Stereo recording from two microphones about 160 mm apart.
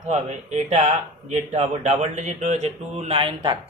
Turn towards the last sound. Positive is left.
turn(degrees=-35)  # may be behind; listen again after turning